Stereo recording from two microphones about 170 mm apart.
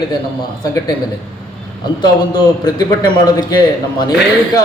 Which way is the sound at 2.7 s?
20° left (ahead or behind).